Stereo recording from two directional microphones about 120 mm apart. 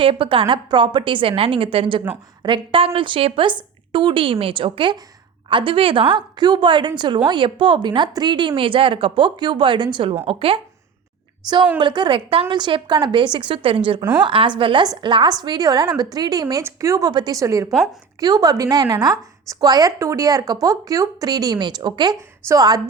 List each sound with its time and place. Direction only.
0.0 s a woman's voice: 50° right (ahead or behind)
11.8 s a woman's voice: 40° right (ahead or behind)